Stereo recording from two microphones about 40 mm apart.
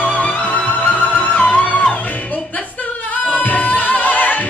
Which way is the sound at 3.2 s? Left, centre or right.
Left.